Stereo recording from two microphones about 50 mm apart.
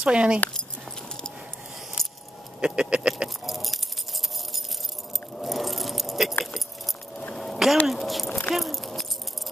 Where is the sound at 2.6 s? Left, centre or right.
Centre.